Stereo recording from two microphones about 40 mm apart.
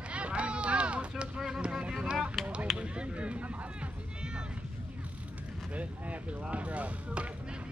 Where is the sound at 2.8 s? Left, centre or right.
Right.